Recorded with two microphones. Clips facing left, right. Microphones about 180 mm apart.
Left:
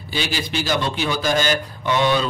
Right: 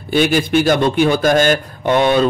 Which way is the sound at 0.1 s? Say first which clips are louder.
Right 11 dB; 55° right (ahead or behind).